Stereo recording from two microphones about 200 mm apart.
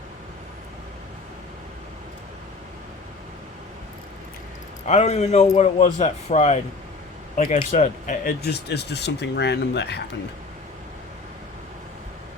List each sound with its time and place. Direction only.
4.9 s a man's voice: 35° left (ahead or behind); by 10.0 s 55° left (ahead or behind)